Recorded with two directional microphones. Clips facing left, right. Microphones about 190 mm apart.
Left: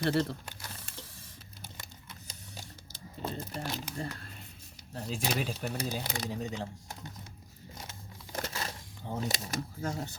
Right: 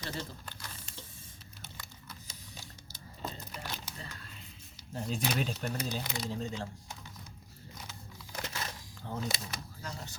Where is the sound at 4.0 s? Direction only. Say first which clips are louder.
Left 9 dB; 45° left (ahead or behind).